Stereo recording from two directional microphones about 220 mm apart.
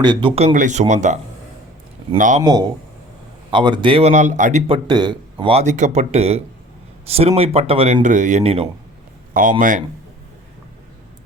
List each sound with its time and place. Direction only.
0.0 s speech: 20° right (ahead or behind); by 2.4 s 35° right (ahead or behind)
2.4 s speech: 20° right (ahead or behind)
4.9 s speech: 20° right (ahead or behind); by 9.8 s 35° right (ahead or behind)